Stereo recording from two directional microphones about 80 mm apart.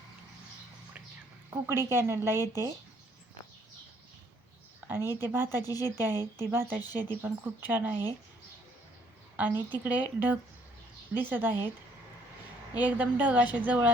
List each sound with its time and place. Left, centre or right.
1.5 s speech: right
4.9 s speech: right
9.3 s a woman's voice: right
12.8 s speech: centre